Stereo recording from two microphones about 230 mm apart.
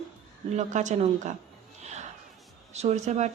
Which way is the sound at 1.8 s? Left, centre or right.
Right.